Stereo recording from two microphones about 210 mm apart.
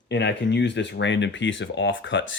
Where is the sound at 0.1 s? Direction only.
55° left (ahead or behind).